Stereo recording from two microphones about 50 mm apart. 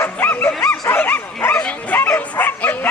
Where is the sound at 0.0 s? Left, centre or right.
Left.